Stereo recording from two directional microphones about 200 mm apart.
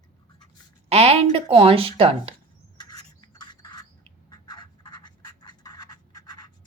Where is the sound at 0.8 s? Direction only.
30° right (ahead or behind).